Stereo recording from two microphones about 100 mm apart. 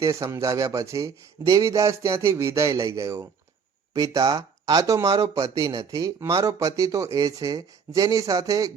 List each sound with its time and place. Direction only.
0.0 s speech: 30° right (ahead or behind)